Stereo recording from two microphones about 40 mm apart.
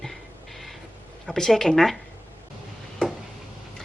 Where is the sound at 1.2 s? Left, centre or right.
Centre.